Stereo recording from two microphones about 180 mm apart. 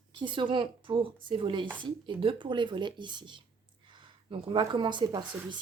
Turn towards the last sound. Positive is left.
turn(degrees=-25)  # may be behind; listen again after turning